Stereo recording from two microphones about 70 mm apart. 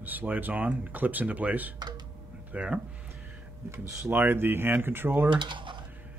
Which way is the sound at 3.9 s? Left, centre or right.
Right.